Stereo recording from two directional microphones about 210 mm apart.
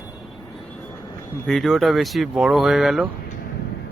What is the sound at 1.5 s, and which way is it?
Speech, centre (ahead or behind).